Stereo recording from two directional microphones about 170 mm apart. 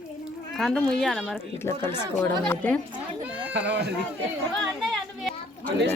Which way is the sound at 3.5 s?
85° right.